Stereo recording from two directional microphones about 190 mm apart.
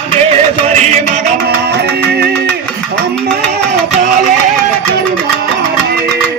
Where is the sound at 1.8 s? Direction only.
60° right (ahead or behind).